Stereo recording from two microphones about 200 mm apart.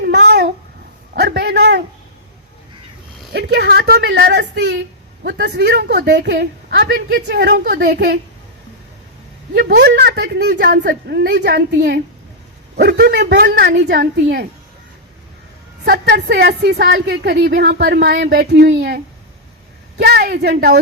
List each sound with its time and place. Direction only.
0.0 s babbling: 55° right (ahead or behind)
1.1 s a sound: 55° right (ahead or behind)
3.3 s a woman's voice: 55° right (ahead or behind)
9.6 s a woman's voice: 55° right (ahead or behind)
15.8 s a woman's voice: 55° right (ahead or behind)